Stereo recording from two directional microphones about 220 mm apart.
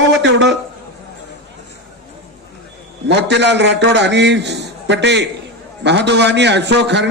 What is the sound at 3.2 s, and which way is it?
A man's voice, 50° right (ahead or behind).